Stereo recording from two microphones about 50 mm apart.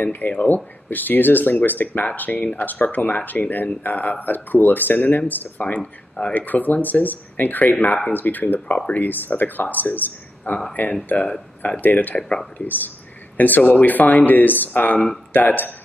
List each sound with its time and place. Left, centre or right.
0.0 s speech: left
5.8 s speech: centre
6.3 s speech: left
8.6 s speech: left
8.9 s speech: left
12.2 s speech: centre
12.5 s speech: left